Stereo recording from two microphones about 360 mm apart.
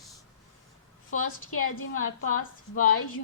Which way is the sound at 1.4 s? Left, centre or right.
Left.